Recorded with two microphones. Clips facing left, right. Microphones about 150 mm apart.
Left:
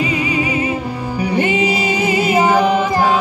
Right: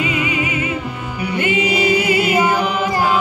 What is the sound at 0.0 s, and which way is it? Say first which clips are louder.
Music: left 2 dB; 35° left (ahead or behind).